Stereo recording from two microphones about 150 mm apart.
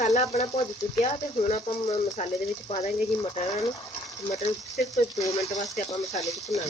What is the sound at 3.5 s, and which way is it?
Speech, 25° left (ahead or behind).